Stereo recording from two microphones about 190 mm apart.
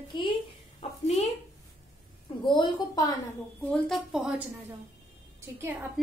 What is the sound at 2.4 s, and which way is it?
Speech, 25° left (ahead or behind).